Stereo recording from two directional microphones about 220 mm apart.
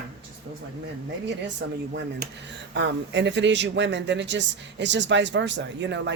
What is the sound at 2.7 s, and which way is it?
Speech, 55° right (ahead or behind).